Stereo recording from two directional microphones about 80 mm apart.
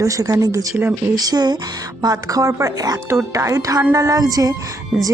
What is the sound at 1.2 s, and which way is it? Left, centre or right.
Speech, right.